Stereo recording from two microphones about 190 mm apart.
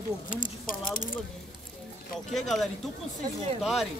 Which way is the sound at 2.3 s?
Centre (ahead or behind).